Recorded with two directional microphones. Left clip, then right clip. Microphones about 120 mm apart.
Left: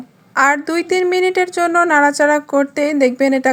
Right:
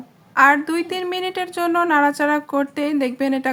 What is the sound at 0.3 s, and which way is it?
A woman's voice, 45° left (ahead or behind).